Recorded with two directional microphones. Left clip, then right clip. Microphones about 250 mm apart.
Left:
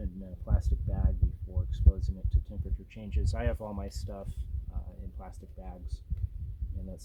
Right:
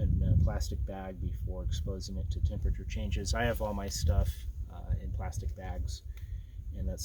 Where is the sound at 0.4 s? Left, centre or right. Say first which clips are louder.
Right 3 dB; right.